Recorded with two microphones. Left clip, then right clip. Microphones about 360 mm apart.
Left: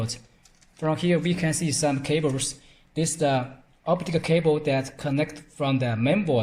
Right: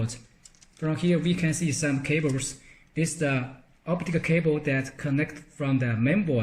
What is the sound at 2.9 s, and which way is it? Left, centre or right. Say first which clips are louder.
Speech: left 4 dB; centre.